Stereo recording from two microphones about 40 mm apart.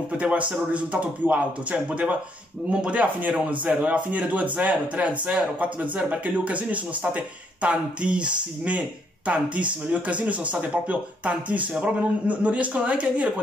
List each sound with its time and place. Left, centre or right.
0.2 s speech: right